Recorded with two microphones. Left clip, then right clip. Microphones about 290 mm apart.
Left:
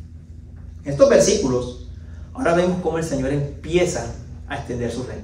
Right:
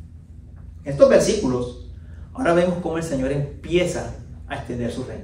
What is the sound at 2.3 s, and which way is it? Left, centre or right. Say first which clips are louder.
A man's voice: even; centre.